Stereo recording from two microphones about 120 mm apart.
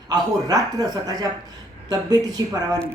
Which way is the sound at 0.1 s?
30° right (ahead or behind).